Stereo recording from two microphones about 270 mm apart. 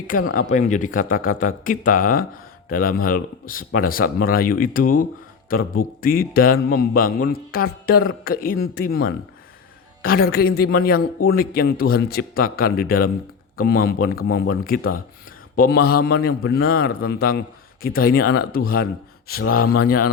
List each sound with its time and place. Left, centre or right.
0.3 s a man's voice: left